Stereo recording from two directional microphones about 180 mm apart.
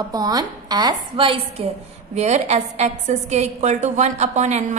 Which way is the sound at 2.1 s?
40° right (ahead or behind).